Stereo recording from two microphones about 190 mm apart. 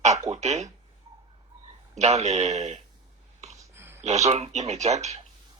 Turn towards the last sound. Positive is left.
turn(degrees=-35)  # may be behind; listen again after turning